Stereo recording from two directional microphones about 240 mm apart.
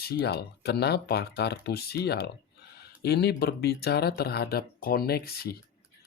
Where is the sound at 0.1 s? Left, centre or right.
Left.